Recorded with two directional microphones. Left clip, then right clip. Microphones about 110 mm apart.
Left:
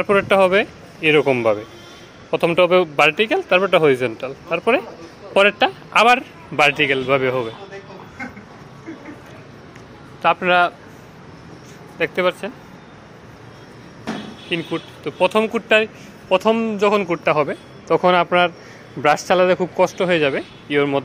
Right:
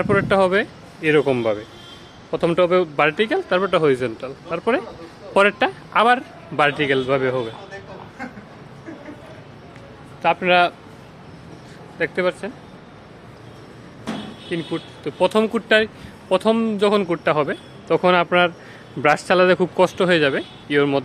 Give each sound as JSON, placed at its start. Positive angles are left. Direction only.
{"t": 0.0, "sound": "a man's voice", "side_deg": -10}
{"t": 5.9, "sound": "a man's voice", "side_deg": -5}
{"t": 10.2, "sound": "a man's voice", "side_deg": -20}
{"t": 12.0, "sound": "speech", "side_deg": -15}
{"t": 14.5, "sound": "speech", "side_deg": -5}
{"t": 15.0, "sound": "speech", "side_deg": -40}
{"t": 17.1, "sound": "a man's voice", "side_deg": -30}
{"t": 19.3, "sound": "speech", "side_deg": -45}